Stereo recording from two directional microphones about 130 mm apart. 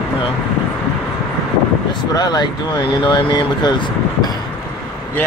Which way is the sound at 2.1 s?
30° left (ahead or behind).